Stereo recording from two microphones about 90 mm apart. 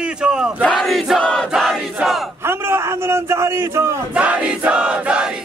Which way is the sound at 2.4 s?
25° right (ahead or behind).